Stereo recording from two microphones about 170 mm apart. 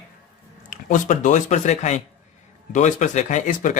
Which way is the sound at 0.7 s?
45° left (ahead or behind).